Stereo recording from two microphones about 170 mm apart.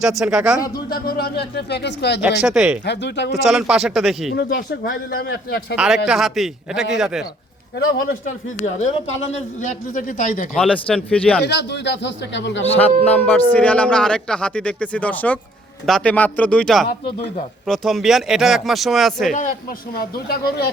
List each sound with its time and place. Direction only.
0.0 s speech: centre (ahead or behind)
0.6 s speech: 20° left (ahead or behind)
0.9 s speech: 65° left (ahead or behind); by 2.2 s 85° left
2.4 s speech: 5° right (ahead or behind)
2.8 s a man's voice: 90° left
3.4 s speech: centre (ahead or behind)
4.4 s speech: 65° left (ahead or behind)
5.7 s speech: 5° right (ahead or behind)
8.6 s a man's voice: 40° left (ahead or behind)
10.5 s speech: 5° left (ahead or behind)
11.4 s a man's voice: 90° left
13.1 s speech: 10° left (ahead or behind)
19.3 s speech: 50° left (ahead or behind); by 20.7 s 65° left (ahead or behind)